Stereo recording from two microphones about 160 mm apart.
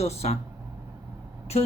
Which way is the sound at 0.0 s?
40° left (ahead or behind).